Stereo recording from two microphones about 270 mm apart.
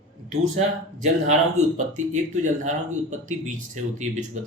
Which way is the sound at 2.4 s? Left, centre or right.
Right.